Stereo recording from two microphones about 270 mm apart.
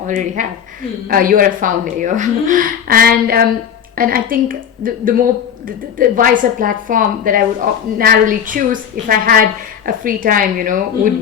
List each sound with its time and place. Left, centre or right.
0.4 s a woman's voice: right